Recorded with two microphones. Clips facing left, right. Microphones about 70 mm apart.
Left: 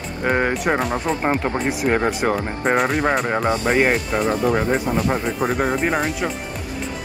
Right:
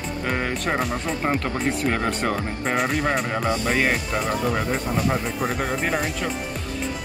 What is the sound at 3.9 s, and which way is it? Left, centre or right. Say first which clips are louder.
Speech: left 4 dB; centre.